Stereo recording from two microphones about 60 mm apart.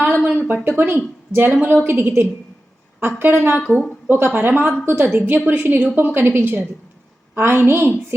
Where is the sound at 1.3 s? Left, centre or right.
Right.